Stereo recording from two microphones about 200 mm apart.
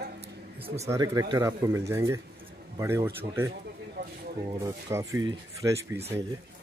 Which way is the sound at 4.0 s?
50° right (ahead or behind).